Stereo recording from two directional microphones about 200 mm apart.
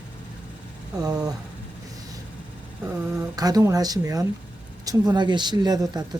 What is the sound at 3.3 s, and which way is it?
Speech, 20° right (ahead or behind).